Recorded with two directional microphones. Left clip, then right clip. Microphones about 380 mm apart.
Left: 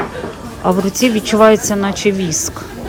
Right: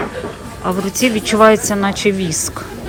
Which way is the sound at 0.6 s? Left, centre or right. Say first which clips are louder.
Left 3 dB; centre.